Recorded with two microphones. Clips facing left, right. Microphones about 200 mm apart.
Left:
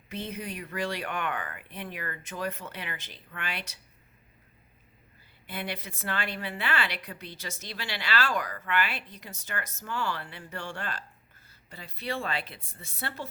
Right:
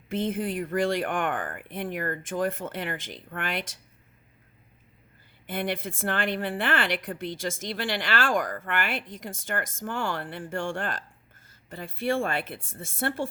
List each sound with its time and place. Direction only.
0.1 s a woman's voice: 50° right (ahead or behind)
5.5 s a woman's voice: 50° right (ahead or behind)